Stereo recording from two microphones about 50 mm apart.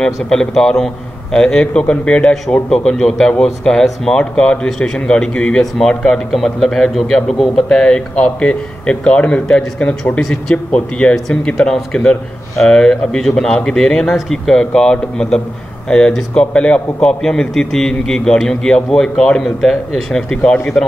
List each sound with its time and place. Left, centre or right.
0.0 s a man's voice: centre
2.7 s a man's voice: centre